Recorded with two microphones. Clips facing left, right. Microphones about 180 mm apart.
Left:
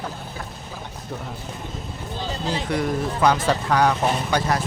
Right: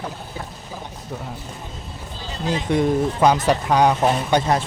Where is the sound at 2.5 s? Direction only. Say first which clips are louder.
Right 6 dB; 20° right (ahead or behind).